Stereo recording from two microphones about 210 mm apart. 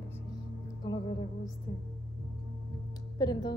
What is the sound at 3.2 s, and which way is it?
Speech, 20° left (ahead or behind).